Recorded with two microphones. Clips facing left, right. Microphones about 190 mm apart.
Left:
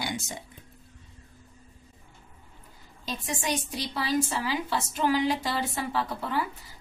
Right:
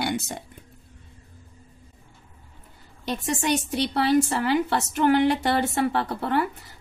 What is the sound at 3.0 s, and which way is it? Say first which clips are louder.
A woman's voice: right 6 dB; 70° right (ahead or behind).